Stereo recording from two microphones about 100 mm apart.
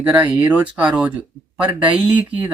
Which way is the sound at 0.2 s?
15° right (ahead or behind).